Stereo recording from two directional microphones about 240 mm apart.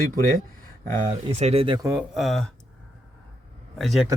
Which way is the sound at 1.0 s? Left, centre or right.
Right.